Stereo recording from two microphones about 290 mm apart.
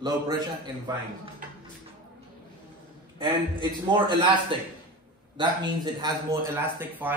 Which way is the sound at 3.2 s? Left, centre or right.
Centre.